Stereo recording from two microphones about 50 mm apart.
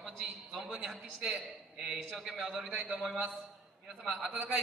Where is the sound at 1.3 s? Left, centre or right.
Centre.